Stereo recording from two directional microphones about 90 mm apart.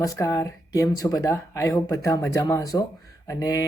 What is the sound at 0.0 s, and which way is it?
Speech, 40° left (ahead or behind).